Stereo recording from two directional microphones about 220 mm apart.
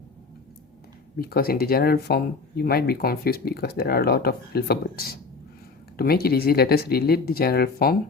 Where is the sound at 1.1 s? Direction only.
45° left (ahead or behind).